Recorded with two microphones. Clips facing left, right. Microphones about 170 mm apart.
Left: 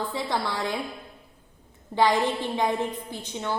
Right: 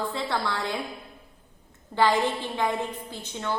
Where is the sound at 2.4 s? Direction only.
15° left (ahead or behind).